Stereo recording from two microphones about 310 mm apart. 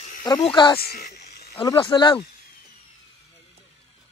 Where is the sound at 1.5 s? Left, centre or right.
Centre.